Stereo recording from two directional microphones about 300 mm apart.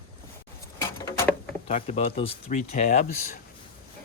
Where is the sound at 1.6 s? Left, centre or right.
Left.